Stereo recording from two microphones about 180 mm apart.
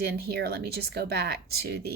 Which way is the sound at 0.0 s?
60° right (ahead or behind).